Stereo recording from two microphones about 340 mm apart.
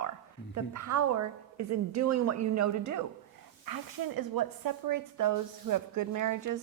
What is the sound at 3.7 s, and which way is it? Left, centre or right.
Speech, right.